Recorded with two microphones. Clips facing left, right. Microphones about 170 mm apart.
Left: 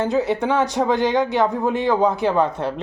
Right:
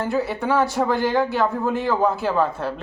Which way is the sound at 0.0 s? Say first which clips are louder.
Left 3 dB; 20° left (ahead or behind).